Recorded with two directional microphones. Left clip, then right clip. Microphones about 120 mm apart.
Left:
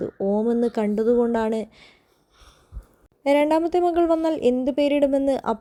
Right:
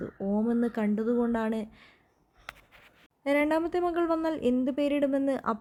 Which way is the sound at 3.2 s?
25° left (ahead or behind).